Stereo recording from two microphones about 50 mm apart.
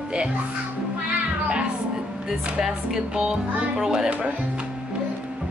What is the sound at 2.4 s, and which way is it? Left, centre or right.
Speech, centre.